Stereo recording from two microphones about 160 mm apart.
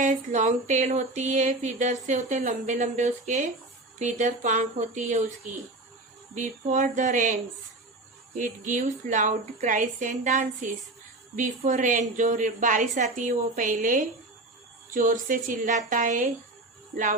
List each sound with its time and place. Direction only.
0.0 s speech: 55° right (ahead or behind)
8.4 s speech: 55° right (ahead or behind)